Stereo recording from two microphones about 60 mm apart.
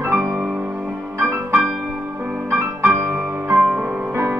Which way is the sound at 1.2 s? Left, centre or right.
Centre.